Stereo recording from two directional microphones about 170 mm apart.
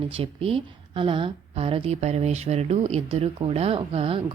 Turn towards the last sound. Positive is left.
turn(degrees=-35)  # may be behind; listen again after turning